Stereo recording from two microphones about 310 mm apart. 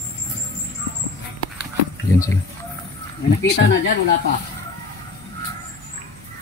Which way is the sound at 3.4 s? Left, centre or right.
Left.